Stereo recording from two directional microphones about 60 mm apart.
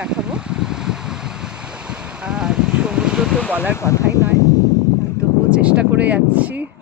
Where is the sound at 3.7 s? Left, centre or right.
Left.